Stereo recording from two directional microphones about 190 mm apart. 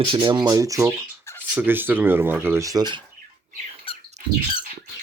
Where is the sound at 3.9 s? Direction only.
30° left (ahead or behind).